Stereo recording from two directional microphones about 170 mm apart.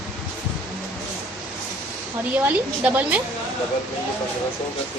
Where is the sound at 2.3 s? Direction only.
10° right (ahead or behind).